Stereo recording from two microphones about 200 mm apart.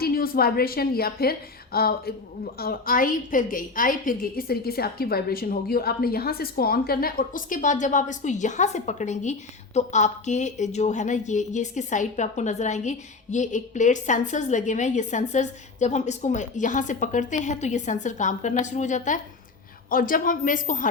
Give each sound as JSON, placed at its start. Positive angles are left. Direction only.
{"t": 0.0, "sound": "a woman's voice", "side_deg": 50}